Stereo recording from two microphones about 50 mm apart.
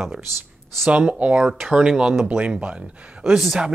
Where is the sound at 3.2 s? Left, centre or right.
Centre.